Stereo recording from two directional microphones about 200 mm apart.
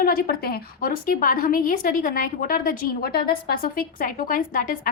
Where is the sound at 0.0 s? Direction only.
45° left (ahead or behind).